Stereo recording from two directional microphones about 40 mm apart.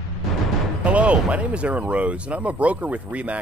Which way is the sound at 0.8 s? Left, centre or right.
Right.